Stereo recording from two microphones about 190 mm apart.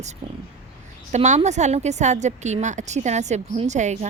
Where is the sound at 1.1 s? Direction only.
35° right (ahead or behind).